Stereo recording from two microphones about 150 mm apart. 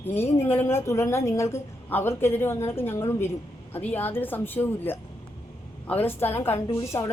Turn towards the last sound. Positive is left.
turn(degrees=20)  # may be behind; listen again after turning